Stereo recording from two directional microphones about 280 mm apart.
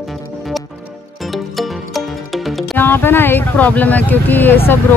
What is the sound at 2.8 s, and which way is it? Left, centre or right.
Speech, centre.